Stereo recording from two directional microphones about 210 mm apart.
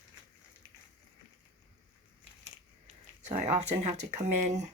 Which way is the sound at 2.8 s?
30° right (ahead or behind).